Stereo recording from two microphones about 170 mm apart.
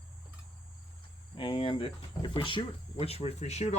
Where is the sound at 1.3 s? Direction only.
30° left (ahead or behind).